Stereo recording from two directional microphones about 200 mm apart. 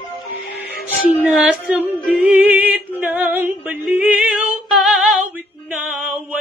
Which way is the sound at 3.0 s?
10° right (ahead or behind).